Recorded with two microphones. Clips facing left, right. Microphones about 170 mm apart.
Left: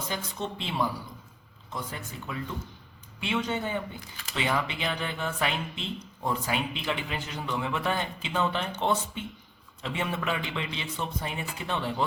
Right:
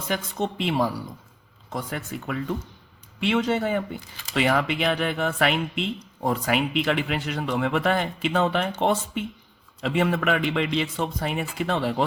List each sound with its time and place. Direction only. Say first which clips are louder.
0.3 s a man's voice: right 7 dB; 70° right (ahead or behind)
9.8 s a man's voice: right 8 dB; 90° right